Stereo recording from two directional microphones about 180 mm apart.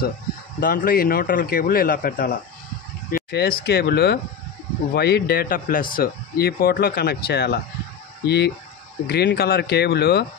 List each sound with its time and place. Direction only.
0.6 s a man's voice: 50° left (ahead or behind)